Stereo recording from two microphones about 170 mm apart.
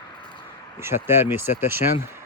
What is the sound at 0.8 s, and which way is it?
Speech, 15° right (ahead or behind).